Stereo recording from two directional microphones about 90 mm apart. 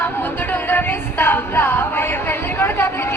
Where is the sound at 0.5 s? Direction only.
25° left (ahead or behind).